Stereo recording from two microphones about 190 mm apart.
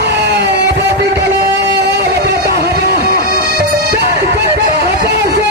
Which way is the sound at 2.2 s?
55° right (ahead or behind).